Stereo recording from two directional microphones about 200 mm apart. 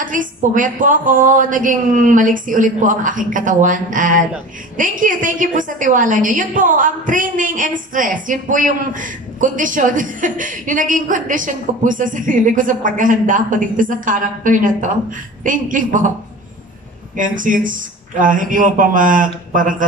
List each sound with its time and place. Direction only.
0.0 s a woman's voice: 40° right (ahead or behind)
17.2 s a woman's voice: 40° right (ahead or behind)